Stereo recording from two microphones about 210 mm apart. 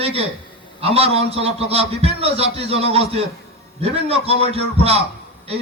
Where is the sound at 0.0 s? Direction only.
30° right (ahead or behind).